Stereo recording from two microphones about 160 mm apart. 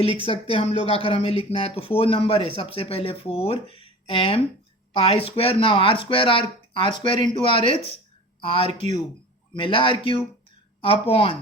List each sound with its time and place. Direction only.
0.3 s speech: 35° left (ahead or behind)